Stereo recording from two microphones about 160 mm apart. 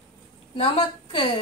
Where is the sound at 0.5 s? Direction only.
40° left (ahead or behind).